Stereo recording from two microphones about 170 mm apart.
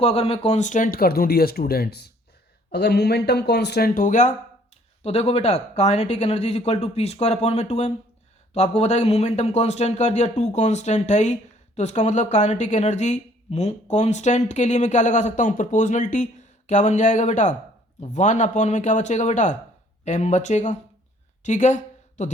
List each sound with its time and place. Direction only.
0.0 s speech: 35° left (ahead or behind)
5.0 s speech: 35° left (ahead or behind)